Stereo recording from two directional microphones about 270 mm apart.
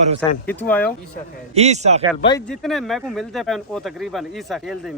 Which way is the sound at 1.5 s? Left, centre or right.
Right.